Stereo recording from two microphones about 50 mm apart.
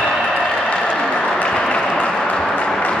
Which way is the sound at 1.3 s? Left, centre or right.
Left.